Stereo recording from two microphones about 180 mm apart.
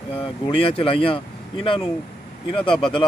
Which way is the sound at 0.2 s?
30° left (ahead or behind).